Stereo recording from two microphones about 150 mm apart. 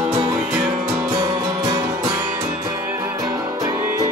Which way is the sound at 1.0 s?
35° right (ahead or behind).